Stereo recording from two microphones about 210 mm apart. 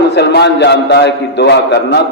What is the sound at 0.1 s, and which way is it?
A man's voice, 55° left (ahead or behind).